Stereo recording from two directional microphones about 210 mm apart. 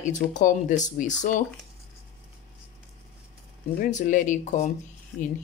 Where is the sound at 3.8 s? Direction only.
35° left (ahead or behind).